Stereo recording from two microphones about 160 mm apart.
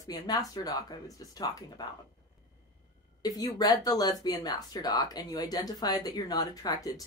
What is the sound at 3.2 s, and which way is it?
Speech, 25° left (ahead or behind).